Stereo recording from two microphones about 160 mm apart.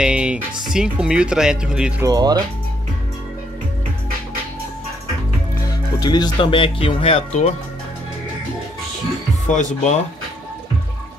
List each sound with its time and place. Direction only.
0.0 s speech: 5° right (ahead or behind)
2.0 s speech: 25° right (ahead or behind)
5.6 s speech: 25° left (ahead or behind)
9.5 s speech: 50° left (ahead or behind)